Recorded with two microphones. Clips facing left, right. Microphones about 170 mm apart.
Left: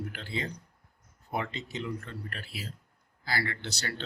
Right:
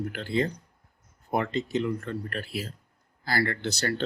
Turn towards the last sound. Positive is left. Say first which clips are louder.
# right 8 dB
turn(degrees=-45)  # may be behind; listen again after turning